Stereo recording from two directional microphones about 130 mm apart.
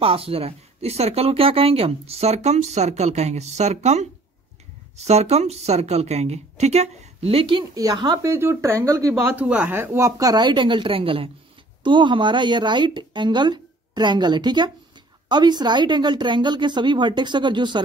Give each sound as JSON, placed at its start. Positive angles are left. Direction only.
{"t": 0.0, "sound": "speech", "side_deg": -45}
{"t": 7.7, "sound": "speech", "side_deg": -30}
{"t": 8.3, "sound": "speech", "side_deg": -20}
{"t": 9.3, "sound": "a woman's voice", "side_deg": -10}